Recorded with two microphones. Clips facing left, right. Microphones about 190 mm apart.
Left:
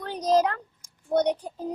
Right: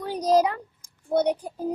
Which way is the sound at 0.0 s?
10° right (ahead or behind).